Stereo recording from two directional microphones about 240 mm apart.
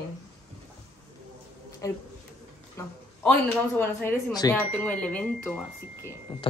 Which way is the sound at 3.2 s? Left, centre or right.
Centre.